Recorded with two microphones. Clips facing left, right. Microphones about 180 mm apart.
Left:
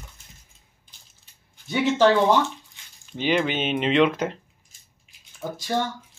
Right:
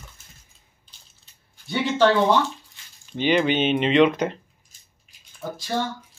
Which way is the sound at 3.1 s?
Centre (ahead or behind).